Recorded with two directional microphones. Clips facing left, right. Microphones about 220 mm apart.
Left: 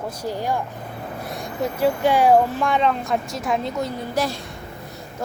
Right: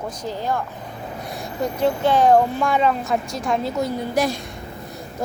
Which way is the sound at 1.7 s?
10° left (ahead or behind).